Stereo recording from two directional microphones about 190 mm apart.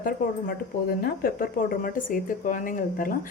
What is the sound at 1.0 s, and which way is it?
Speech, 50° left (ahead or behind).